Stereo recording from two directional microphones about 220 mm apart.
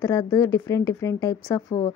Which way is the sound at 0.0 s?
15° left (ahead or behind).